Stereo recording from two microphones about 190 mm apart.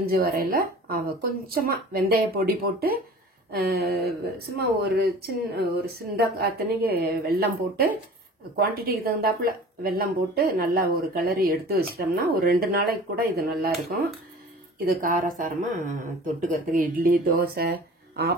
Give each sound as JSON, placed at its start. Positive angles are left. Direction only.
{"t": 0.0, "sound": "speech", "side_deg": -55}